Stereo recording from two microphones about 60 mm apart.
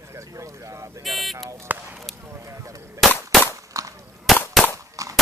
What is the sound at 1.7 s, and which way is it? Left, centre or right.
Speech, right.